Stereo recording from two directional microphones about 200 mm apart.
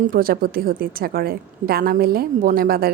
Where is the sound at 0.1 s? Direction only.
45° right (ahead or behind).